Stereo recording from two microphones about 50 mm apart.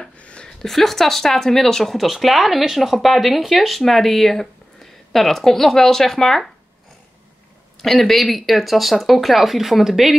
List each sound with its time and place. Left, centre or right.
0.2 s a sound: centre
0.7 s speech: centre
7.8 s speech: centre